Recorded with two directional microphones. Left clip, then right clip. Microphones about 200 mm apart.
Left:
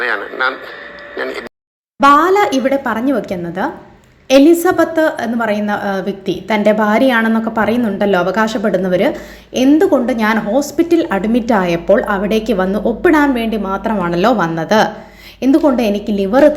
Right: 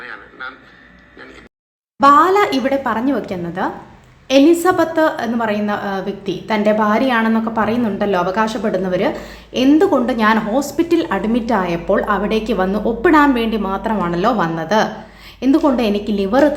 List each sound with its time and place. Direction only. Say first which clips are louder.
0.0 s a man's voice: left 14 dB; 50° left (ahead or behind)
2.0 s a woman's voice: left 1 dB; 10° left (ahead or behind)